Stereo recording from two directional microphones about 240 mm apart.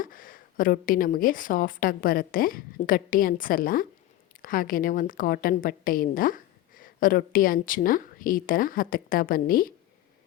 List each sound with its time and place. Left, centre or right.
0.0 s a woman's voice: left